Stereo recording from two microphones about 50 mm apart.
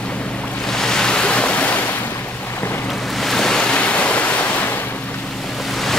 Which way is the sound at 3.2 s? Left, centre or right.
Centre.